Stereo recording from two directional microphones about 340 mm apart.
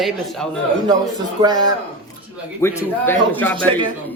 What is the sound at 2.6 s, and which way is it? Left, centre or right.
Speech, centre.